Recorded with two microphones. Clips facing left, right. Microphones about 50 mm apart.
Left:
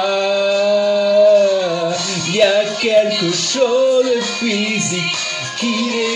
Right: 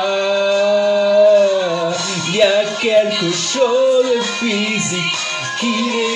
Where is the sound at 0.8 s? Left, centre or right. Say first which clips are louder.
Even; centre.